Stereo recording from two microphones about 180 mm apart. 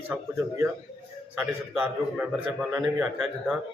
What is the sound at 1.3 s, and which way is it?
A man's voice, 10° right (ahead or behind).